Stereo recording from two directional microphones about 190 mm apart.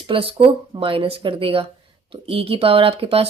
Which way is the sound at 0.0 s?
30° right (ahead or behind).